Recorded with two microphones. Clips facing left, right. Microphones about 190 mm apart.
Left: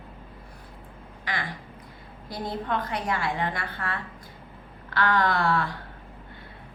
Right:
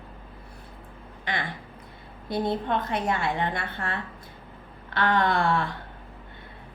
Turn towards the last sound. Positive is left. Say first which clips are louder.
# right 1 dB
turn(degrees=-25)  # may be behind; listen again after turning